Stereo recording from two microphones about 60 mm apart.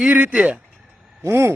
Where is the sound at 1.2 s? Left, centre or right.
Right.